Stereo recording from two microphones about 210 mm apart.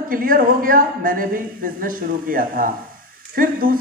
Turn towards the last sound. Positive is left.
turn(degrees=-45)  # may be behind; listen again after turning